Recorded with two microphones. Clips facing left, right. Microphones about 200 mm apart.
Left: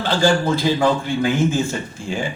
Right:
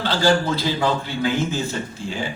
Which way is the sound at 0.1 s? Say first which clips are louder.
Left 2 dB; 50° left (ahead or behind).